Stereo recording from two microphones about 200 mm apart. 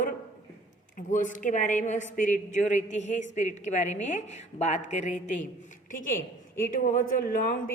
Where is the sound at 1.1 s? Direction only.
40° left (ahead or behind).